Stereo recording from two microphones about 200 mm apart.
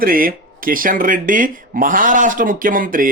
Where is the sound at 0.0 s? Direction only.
45° right (ahead or behind).